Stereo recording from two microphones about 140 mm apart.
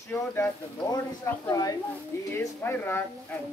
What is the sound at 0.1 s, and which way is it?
Speech, 15° left (ahead or behind).